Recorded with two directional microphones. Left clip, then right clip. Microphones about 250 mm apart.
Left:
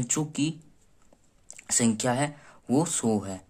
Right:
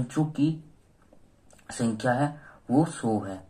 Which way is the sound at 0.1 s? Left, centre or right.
Left.